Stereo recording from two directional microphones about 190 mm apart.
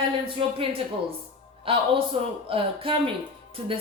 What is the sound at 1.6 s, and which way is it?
A woman's voice, 30° right (ahead or behind).